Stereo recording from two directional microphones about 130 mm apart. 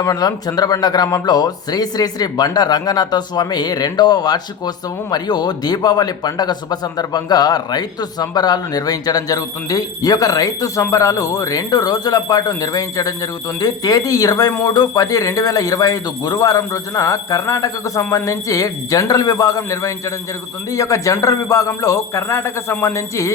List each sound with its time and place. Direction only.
0.0 s speech: 25° left (ahead or behind)